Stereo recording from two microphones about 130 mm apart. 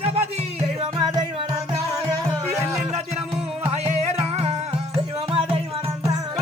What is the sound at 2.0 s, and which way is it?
Music, 20° right (ahead or behind).